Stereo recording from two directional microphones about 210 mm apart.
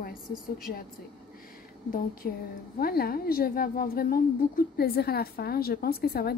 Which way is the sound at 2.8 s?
45° left (ahead or behind).